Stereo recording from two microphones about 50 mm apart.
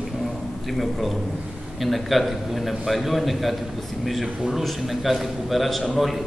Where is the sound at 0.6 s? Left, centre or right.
Centre.